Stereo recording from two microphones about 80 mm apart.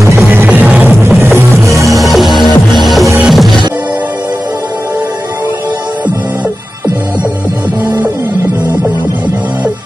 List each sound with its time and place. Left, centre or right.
0.3 s music: right
1.0 s music: right
1.9 s music: centre